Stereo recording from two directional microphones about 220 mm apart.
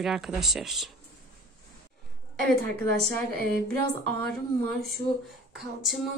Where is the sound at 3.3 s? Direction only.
45° right (ahead or behind).